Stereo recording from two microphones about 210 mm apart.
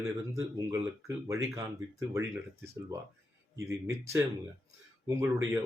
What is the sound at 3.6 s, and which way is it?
Speech, 15° right (ahead or behind).